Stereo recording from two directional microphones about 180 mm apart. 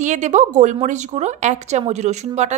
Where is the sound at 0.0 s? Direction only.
40° right (ahead or behind).